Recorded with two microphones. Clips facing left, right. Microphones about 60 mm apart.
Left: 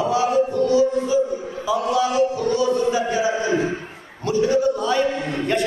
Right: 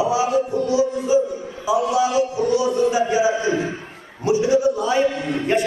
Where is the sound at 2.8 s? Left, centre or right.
Centre.